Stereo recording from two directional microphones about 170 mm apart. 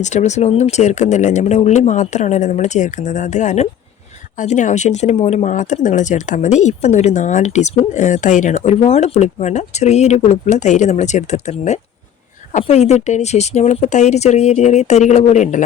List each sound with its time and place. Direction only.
0.0 s speech: 45° left (ahead or behind)